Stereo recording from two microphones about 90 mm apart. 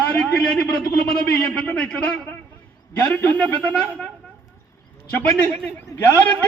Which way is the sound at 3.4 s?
15° left (ahead or behind).